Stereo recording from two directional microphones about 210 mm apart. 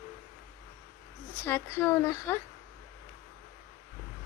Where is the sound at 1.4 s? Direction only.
10° left (ahead or behind).